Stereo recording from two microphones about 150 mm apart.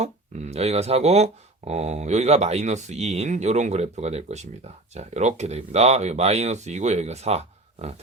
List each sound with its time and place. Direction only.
0.0 s speech: 50° right (ahead or behind)